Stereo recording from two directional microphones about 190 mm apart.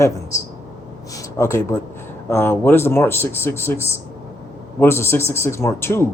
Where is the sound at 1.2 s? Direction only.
15° left (ahead or behind).